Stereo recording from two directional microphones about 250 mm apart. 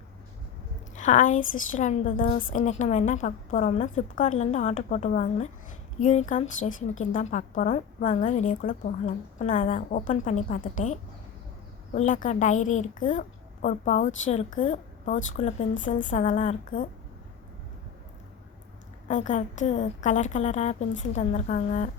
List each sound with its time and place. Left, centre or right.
0.9 s a woman's voice: left
11.9 s a woman's voice: left
19.0 s a woman's voice: left